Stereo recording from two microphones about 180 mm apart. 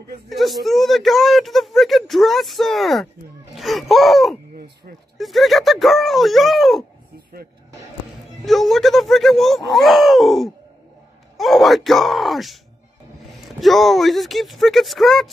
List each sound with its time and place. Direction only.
0.4 s speech: centre (ahead or behind)
8.5 s speech: centre (ahead or behind)